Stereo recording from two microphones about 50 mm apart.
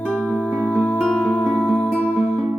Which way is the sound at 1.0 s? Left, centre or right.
Centre.